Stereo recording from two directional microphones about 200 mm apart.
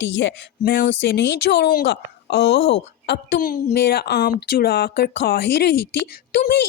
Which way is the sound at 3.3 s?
40° left (ahead or behind).